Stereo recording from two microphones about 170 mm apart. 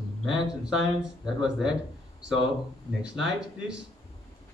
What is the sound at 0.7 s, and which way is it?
Speech, 5° right (ahead or behind).